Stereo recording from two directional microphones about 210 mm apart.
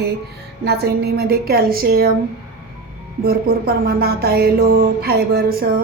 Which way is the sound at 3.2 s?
45° right (ahead or behind).